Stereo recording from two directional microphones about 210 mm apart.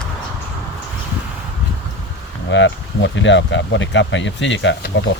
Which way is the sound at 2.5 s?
60° left (ahead or behind).